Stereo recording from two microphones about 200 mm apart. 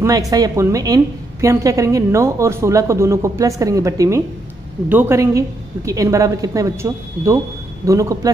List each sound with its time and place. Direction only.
0.0 s a woman's voice: 15° right (ahead or behind)